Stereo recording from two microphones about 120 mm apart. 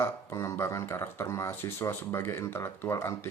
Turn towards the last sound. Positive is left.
turn(degrees=20)  # may be behind; listen again after turning